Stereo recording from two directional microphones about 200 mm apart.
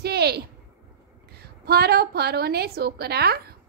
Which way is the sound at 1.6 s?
50° right (ahead or behind).